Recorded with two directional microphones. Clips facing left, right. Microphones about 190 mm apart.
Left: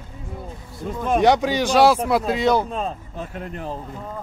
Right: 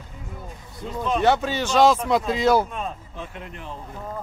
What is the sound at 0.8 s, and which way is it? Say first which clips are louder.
Speech: left 3 dB; 50° left (ahead or behind).